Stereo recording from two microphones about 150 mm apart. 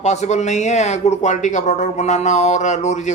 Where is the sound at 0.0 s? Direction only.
50° left (ahead or behind).